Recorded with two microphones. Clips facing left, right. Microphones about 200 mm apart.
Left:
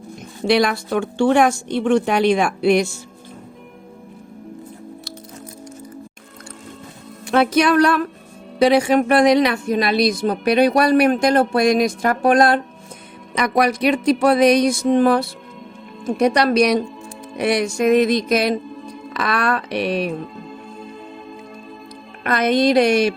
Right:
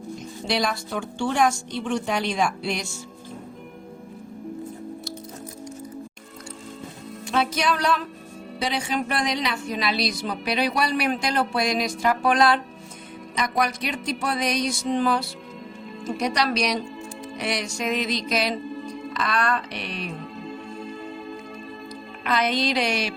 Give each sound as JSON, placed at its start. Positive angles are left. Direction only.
{"t": 0.4, "sound": "a woman's voice", "side_deg": 65}
{"t": 7.3, "sound": "a woman's voice", "side_deg": 60}
{"t": 10.4, "sound": "music", "side_deg": 50}
{"t": 13.3, "sound": "a woman's voice", "side_deg": 65}
{"t": 17.3, "sound": "music", "side_deg": 55}
{"t": 19.1, "sound": "a woman's voice", "side_deg": 65}
{"t": 20.4, "sound": "music", "side_deg": 0}
{"t": 22.2, "sound": "music", "side_deg": 50}